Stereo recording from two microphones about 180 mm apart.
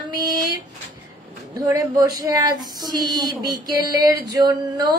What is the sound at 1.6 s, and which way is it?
Speech, 20° right (ahead or behind).